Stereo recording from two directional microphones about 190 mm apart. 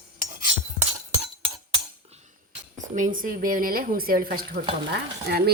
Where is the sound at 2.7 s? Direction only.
40° right (ahead or behind); by 5.5 s 60° right (ahead or behind).